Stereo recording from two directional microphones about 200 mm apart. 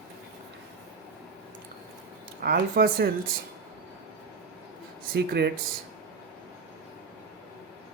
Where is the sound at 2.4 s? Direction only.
45° right (ahead or behind).